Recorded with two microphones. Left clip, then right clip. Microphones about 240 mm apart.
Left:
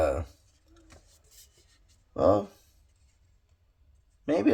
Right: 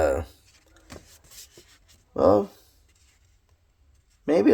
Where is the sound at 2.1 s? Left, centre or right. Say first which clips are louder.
Right 4 dB; right.